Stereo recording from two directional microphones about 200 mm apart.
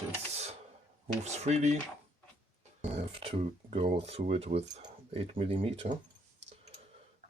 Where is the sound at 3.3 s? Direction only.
30° right (ahead or behind).